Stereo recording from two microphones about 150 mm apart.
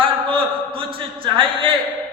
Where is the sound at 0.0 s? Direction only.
35° right (ahead or behind).